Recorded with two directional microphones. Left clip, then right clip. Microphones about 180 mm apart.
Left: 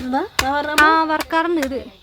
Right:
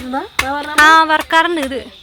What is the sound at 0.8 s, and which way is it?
Speech, centre (ahead or behind).